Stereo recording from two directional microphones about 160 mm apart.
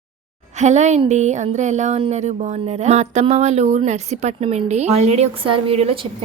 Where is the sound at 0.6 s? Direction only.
45° right (ahead or behind).